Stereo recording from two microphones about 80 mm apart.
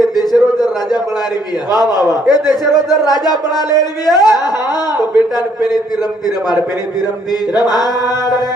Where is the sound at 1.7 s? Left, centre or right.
Left.